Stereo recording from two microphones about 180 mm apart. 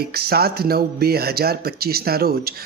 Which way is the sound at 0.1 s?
60° right (ahead or behind).